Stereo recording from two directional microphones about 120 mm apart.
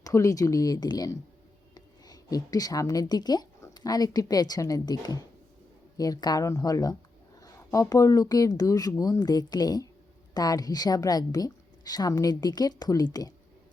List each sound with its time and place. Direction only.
0.0 s a woman's voice: 25° left (ahead or behind)